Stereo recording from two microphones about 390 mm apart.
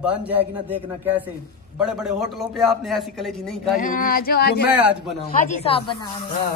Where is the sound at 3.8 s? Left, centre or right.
Left.